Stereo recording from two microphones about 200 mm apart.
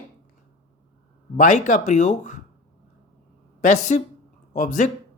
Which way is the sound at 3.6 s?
35° left (ahead or behind).